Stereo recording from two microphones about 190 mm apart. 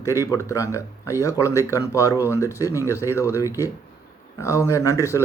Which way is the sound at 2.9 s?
10° right (ahead or behind).